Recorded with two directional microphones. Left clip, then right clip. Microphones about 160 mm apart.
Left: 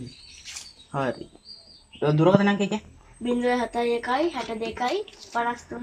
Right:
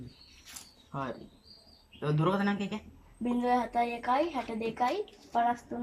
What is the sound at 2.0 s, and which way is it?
Speech, 55° left (ahead or behind).